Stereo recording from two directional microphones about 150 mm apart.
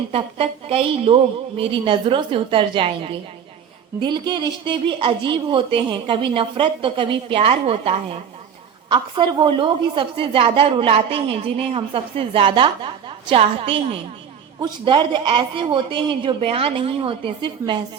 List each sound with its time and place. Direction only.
0.1 s a woman's voice: 40° right (ahead or behind)